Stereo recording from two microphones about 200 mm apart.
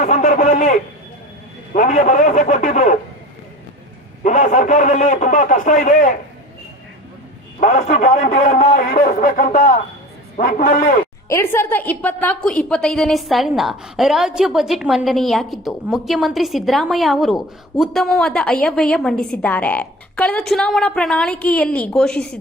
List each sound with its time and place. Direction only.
0.0 s a sound: 40° left (ahead or behind)
1.7 s a man's voice: 40° left (ahead or behind)
4.2 s a man's voice: 40° left (ahead or behind)
7.6 s a man's voice: 35° left (ahead or behind)
11.3 s a woman's voice: 10° left (ahead or behind)